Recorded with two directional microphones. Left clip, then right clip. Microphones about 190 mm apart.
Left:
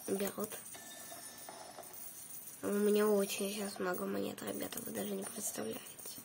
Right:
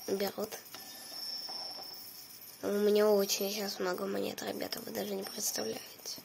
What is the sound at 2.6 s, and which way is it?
Speech, 25° left (ahead or behind).